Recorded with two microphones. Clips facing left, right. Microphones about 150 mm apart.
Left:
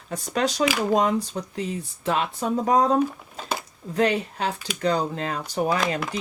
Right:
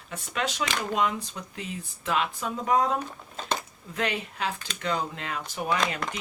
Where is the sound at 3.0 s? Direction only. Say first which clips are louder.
Left 10 dB; 5° left (ahead or behind).